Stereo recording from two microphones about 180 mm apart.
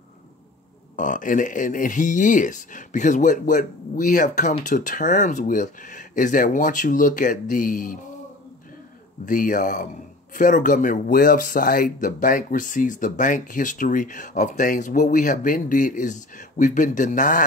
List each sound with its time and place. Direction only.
0.9 s speech: 45° left (ahead or behind)
9.2 s speech: 50° left (ahead or behind)